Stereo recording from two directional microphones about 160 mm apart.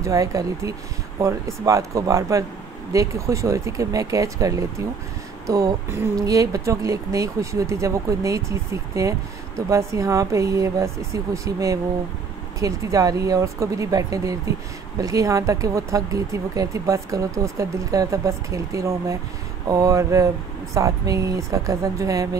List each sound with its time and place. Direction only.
0.0 s speech: 20° right (ahead or behind)